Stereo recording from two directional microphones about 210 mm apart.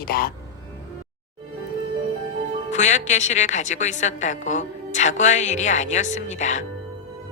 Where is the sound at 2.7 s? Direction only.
35° left (ahead or behind).